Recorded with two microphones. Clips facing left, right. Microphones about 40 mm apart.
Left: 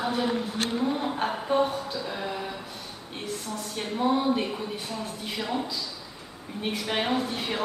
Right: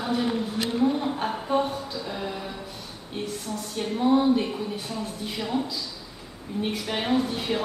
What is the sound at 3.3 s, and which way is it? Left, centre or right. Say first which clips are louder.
A woman's voice: right 1 dB; centre.